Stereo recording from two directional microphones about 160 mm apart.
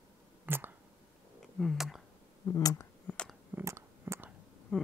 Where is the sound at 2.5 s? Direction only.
20° left (ahead or behind).